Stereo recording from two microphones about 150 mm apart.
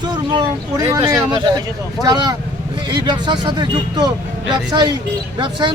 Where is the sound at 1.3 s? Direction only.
30° right (ahead or behind).